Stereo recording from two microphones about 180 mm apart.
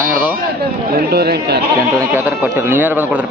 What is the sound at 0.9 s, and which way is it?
Speech, 60° right (ahead or behind).